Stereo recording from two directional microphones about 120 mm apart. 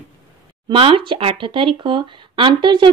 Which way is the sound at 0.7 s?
50° right (ahead or behind).